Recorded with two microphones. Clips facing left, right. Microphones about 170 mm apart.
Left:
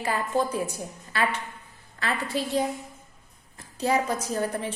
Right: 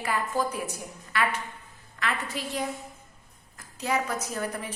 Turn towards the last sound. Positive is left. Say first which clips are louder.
# left 4 dB
turn(degrees=30)  # may be behind; listen again after turning